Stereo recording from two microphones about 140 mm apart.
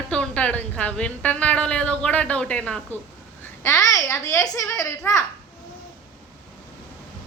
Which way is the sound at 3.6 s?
25° left (ahead or behind).